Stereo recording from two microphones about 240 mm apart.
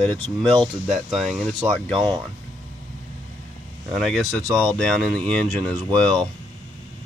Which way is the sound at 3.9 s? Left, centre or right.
Centre.